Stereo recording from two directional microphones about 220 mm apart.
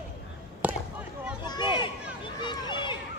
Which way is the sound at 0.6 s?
5° right (ahead or behind).